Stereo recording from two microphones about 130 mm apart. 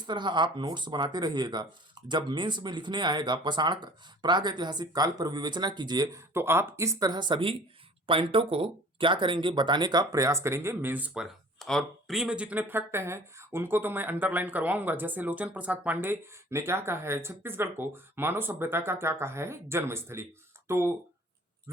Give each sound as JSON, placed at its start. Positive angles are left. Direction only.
{"t": 0.0, "sound": "speech", "side_deg": -35}
{"t": 6.3, "sound": "speech", "side_deg": -20}